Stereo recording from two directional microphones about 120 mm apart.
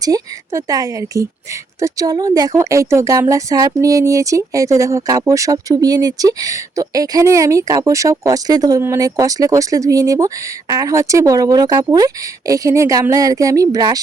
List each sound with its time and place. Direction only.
0.0 s speech: 30° right (ahead or behind)